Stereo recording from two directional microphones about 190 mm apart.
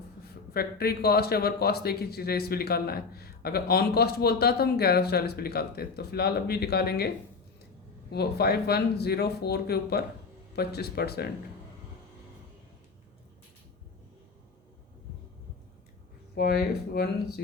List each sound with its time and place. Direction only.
0.5 s a man's voice: 55° left (ahead or behind)
8.1 s a man's voice: 55° left (ahead or behind)
16.3 s a man's voice: 55° left (ahead or behind)